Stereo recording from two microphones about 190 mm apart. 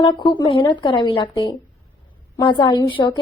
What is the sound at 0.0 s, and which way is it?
A woman's voice, 25° left (ahead or behind).